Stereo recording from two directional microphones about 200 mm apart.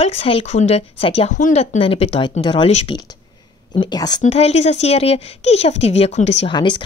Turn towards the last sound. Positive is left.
turn(degrees=25)  # may be behind; listen again after turning